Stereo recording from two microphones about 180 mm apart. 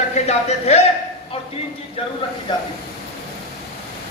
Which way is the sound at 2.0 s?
30° left (ahead or behind).